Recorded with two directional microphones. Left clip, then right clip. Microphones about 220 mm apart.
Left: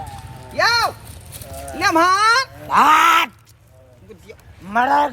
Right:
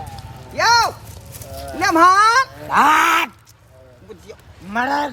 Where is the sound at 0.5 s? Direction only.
Centre (ahead or behind).